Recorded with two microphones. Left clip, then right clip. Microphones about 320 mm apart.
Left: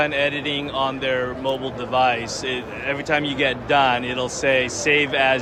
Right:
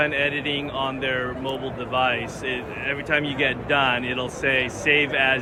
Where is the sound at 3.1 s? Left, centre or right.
Centre.